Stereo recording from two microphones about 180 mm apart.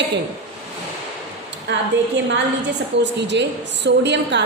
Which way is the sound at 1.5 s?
75° right (ahead or behind).